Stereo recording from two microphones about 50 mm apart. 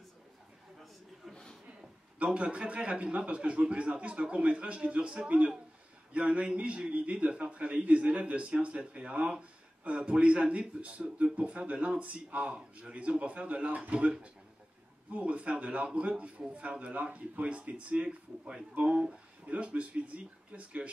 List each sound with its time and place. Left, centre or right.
2.1 s a man's voice: right